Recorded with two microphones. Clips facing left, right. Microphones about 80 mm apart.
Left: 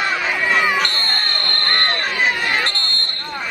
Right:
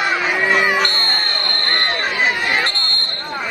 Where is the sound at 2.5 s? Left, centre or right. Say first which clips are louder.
Right 1 dB; centre.